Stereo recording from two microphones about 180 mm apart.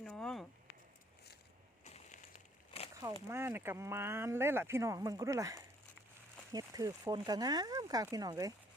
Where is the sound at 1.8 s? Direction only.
40° left (ahead or behind).